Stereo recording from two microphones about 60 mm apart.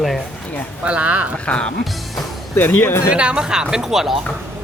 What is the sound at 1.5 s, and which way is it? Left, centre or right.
Speech, centre.